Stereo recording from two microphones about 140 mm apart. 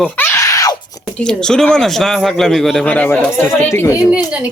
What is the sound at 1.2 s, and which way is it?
A man's voice, 5° left (ahead or behind).